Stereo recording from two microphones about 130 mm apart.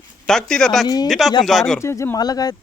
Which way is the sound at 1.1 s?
Centre (ahead or behind).